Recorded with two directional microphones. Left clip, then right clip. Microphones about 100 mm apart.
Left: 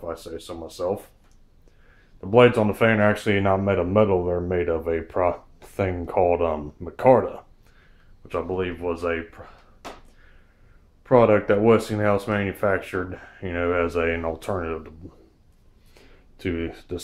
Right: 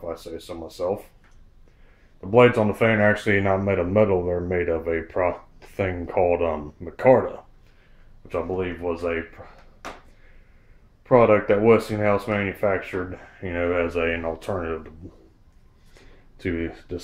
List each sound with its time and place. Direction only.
0.0 s speech: 25° left (ahead or behind)
2.3 s speech: 20° left (ahead or behind)
8.5 s speech: 15° left (ahead or behind)
11.1 s speech: 20° left (ahead or behind)
14.4 s speech: 15° left (ahead or behind)
16.3 s speech: 15° left (ahead or behind)